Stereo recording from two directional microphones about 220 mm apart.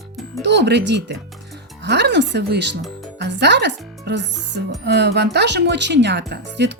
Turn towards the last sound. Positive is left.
turn(degrees=-50)  # may be behind; listen again after turning